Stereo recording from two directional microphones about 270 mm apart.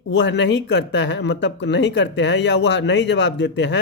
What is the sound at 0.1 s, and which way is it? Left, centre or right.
Speech, left.